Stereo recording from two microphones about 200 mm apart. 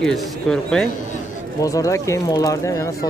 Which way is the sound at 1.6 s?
15° left (ahead or behind).